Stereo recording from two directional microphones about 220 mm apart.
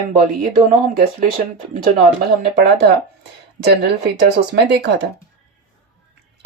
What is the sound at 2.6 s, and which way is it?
Speech, 45° right (ahead or behind).